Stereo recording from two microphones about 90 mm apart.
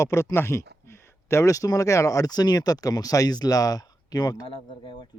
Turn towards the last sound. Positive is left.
turn(degrees=75)  # may be behind; listen again after turning